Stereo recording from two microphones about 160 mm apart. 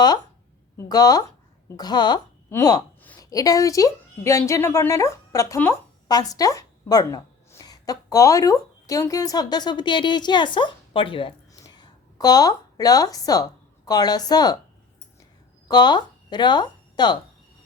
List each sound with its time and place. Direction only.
0.8 s a woman's voice: 25° left (ahead or behind)
15.6 s speech: 25° left (ahead or behind)